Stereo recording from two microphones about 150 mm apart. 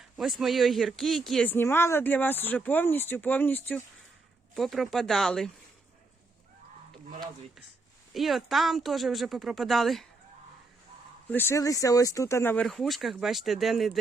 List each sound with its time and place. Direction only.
0.2 s speech: centre (ahead or behind)
1.5 s speech: 15° left (ahead or behind)
4.5 s speech: centre (ahead or behind)
8.1 s speech: centre (ahead or behind)
11.3 s speech: 15° left (ahead or behind)
12.6 s speech: centre (ahead or behind)